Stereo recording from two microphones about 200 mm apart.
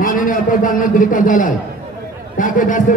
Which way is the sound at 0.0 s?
40° left (ahead or behind).